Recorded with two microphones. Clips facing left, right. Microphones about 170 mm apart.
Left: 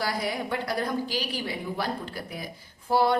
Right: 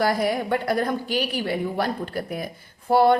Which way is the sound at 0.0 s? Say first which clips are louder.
Right 7 dB; 55° right (ahead or behind).